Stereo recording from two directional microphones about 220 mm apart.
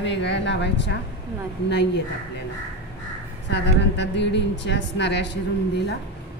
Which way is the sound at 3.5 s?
50° left (ahead or behind).